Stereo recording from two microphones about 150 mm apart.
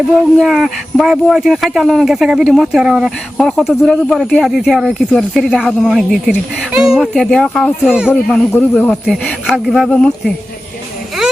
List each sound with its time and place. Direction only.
0.3 s speech: centre (ahead or behind)
8.1 s speech: 5° left (ahead or behind)